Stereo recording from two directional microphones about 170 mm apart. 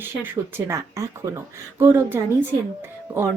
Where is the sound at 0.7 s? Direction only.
15° right (ahead or behind).